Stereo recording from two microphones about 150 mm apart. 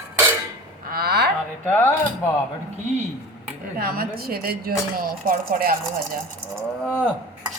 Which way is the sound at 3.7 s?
75° right (ahead or behind).